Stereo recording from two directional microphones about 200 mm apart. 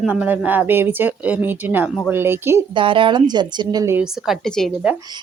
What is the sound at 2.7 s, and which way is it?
A woman's voice, 25° right (ahead or behind).